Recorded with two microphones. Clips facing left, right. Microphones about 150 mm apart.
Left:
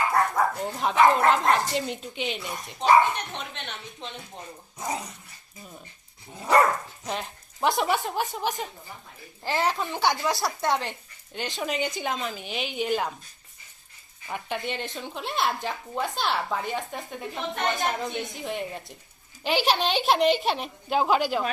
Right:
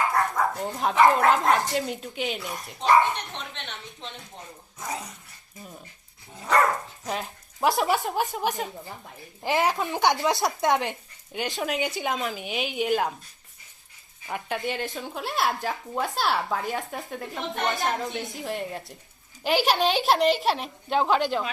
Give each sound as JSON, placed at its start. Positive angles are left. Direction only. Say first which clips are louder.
{"t": 0.6, "sound": "speech", "louder": "right 1 dB", "side_deg": 0}
{"t": 6.4, "sound": "dog", "louder": "left 2 dB", "side_deg": 20}
{"t": 7.0, "sound": "speech", "louder": "right 1 dB", "side_deg": 0}
{"t": 9.4, "sound": "speech", "louder": "right 2 dB", "side_deg": -20}
{"t": 11.6, "sound": "speech", "louder": "even", "side_deg": 0}
{"t": 14.3, "sound": "speech", "louder": "right 2 dB", "side_deg": 0}